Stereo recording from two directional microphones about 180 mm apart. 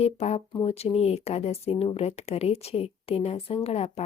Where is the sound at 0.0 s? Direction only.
35° left (ahead or behind).